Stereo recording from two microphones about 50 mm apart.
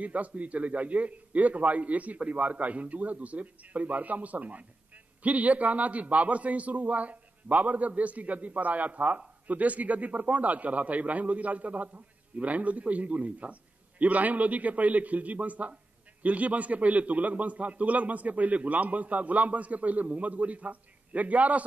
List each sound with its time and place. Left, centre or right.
0.0 s a man's voice: right